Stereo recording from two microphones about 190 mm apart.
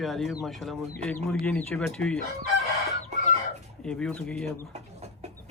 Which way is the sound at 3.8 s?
5° left (ahead or behind).